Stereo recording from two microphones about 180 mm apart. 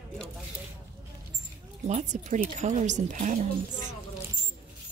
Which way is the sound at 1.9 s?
40° right (ahead or behind).